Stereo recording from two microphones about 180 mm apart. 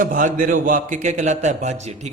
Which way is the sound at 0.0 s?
45° right (ahead or behind).